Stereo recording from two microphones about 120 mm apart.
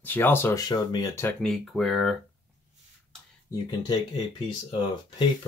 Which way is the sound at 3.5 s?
35° left (ahead or behind).